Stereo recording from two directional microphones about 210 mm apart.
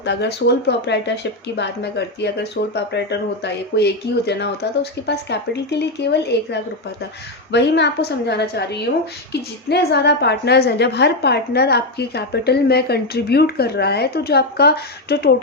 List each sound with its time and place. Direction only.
0.0 s speech: 55° left (ahead or behind)